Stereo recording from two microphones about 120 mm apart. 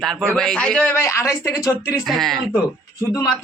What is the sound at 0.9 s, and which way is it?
Speech, 20° left (ahead or behind).